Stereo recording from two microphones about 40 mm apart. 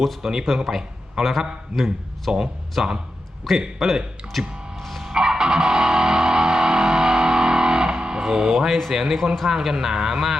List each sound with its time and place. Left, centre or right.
0.2 s a man's voice: centre
1.2 s a man's voice: centre
3.5 s a man's voice: centre
4.8 s music: centre
5.1 s music: centre
8.5 s a man's voice: centre